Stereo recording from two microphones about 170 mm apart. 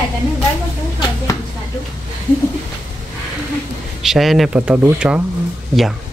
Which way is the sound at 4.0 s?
Centre (ahead or behind).